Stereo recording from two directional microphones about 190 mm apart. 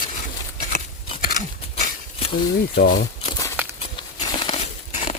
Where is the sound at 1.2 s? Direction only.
45° left (ahead or behind).